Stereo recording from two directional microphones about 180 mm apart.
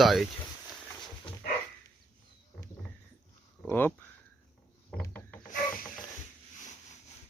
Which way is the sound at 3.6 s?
10° left (ahead or behind).